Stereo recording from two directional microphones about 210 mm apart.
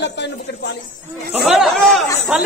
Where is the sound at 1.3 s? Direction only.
5° right (ahead or behind).